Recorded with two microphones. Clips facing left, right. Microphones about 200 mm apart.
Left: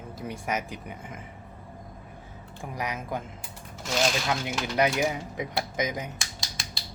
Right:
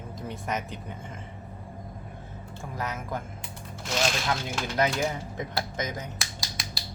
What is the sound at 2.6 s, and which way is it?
Speech, 15° left (ahead or behind).